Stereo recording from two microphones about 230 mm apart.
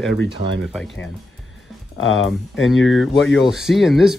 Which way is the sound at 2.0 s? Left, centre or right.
Left.